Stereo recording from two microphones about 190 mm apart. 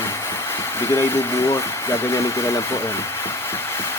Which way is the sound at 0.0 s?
15° left (ahead or behind).